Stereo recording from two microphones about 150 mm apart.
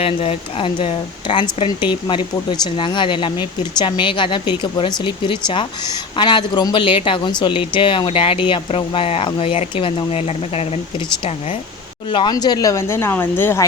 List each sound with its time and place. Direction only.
0.0 s speech: 40° left (ahead or behind); by 13.7 s 15° left (ahead or behind)